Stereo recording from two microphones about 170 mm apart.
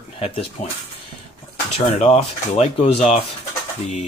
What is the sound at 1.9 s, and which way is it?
Speech, 40° left (ahead or behind).